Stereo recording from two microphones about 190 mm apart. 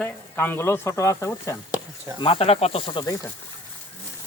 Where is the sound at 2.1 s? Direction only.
25° left (ahead or behind).